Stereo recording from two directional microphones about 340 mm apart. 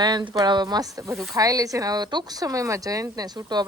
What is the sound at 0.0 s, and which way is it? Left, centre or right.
Speech, centre.